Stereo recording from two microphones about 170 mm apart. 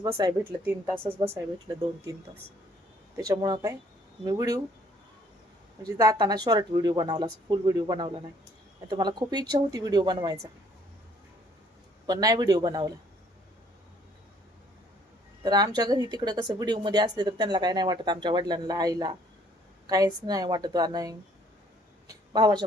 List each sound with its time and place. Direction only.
0.0 s speech: 25° right (ahead or behind)
3.2 s speech: 20° right (ahead or behind)
6.0 s speech: 20° right (ahead or behind)
12.0 s speech: 20° right (ahead or behind)
15.4 s speech: 25° right (ahead or behind)
22.0 s a sound: 25° right (ahead or behind)